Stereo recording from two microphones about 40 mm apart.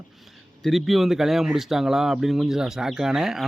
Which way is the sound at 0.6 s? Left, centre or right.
Centre.